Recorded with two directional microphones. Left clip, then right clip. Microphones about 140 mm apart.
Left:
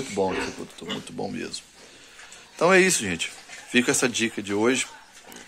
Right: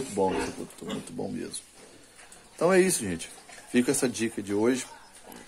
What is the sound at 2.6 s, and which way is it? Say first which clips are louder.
Speech: left 4 dB; 10° left (ahead or behind).